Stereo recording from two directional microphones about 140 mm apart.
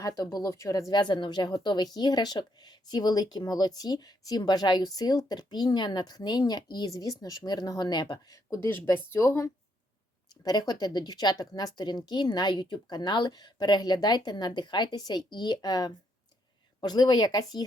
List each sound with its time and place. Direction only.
0.0 s speech: 25° left (ahead or behind)